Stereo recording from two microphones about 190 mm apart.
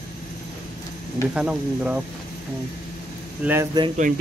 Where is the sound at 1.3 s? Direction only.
5° right (ahead or behind).